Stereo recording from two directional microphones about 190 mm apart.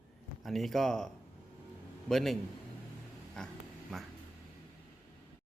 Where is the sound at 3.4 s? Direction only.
5° left (ahead or behind).